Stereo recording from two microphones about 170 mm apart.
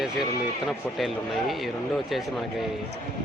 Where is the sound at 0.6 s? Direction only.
Centre (ahead or behind).